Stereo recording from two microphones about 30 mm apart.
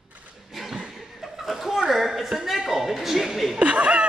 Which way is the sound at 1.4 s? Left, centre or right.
Centre.